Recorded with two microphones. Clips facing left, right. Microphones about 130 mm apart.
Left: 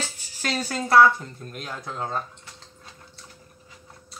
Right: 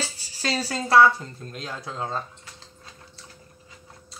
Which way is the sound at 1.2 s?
25° right (ahead or behind).